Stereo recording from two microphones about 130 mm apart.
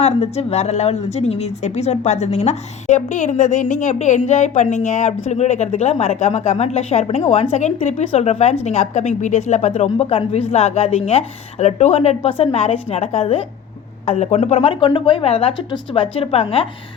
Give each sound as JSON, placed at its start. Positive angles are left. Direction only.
{"t": 0.0, "sound": "a woman's voice", "side_deg": 55}